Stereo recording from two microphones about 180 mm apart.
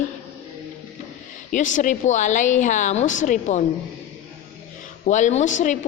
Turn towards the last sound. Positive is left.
turn(degrees=45)  # may be behind; listen again after turning